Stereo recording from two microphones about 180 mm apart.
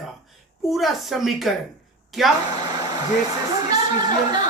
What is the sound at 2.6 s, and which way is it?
Speech, 25° right (ahead or behind).